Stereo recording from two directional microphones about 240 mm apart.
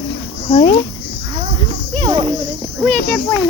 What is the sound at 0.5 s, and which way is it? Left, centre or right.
Speech, left.